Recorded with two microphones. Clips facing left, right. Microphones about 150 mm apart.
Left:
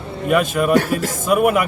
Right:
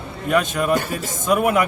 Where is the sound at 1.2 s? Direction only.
5° left (ahead or behind).